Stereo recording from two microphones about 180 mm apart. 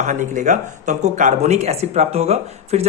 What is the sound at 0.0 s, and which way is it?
Speech, 45° right (ahead or behind).